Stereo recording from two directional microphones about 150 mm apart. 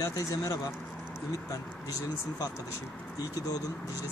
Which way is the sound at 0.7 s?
10° left (ahead or behind).